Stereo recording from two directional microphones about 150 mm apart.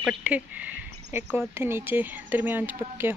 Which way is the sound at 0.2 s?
10° right (ahead or behind).